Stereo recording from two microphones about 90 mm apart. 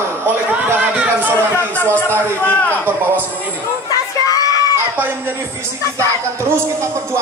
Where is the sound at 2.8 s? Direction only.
20° right (ahead or behind).